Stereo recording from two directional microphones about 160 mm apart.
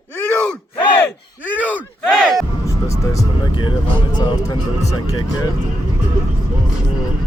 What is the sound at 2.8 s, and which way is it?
Vehicle, 25° left (ahead or behind).